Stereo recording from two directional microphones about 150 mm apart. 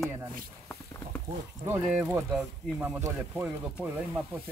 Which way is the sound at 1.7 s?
5° right (ahead or behind).